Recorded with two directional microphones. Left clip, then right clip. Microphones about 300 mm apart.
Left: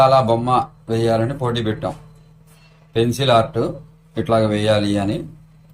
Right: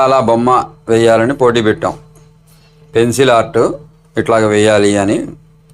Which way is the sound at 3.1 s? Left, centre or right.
Right.